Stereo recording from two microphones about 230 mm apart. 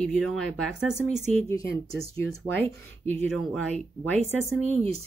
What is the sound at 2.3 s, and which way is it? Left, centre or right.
Speech, centre.